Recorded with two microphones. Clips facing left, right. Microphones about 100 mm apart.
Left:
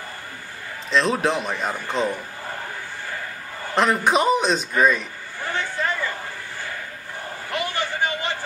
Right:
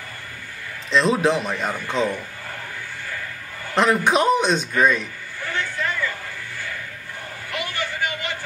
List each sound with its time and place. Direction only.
0.8 s a man's voice: centre (ahead or behind)
3.7 s a man's voice: centre (ahead or behind)
5.4 s vehicle: 35° left (ahead or behind)
7.5 s a sound: 30° left (ahead or behind)